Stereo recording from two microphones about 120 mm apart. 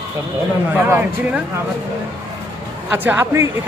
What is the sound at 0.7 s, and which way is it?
Speech, 20° right (ahead or behind).